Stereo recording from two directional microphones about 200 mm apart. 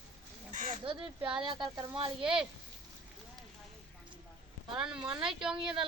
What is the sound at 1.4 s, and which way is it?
Speech, 25° right (ahead or behind).